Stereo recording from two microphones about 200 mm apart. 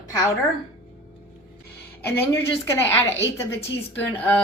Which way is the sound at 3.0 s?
65° left (ahead or behind).